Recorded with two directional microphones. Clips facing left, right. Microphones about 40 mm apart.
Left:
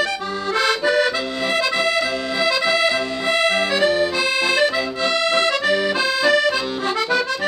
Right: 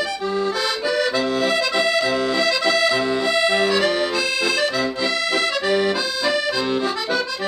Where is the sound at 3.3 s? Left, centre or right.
Left.